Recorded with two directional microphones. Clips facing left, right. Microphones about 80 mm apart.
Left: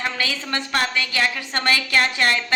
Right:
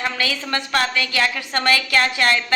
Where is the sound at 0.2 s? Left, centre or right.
Left.